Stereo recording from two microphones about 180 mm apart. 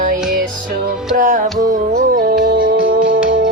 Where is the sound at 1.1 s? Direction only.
45° right (ahead or behind).